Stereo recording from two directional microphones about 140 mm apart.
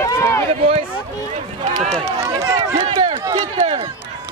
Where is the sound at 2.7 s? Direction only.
40° right (ahead or behind).